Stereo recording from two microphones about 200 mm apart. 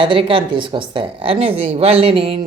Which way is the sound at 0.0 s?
25° right (ahead or behind).